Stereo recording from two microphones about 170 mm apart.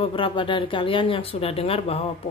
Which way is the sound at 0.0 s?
30° left (ahead or behind).